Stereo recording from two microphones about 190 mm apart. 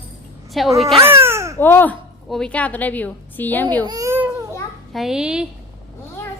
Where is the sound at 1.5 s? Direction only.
10° left (ahead or behind).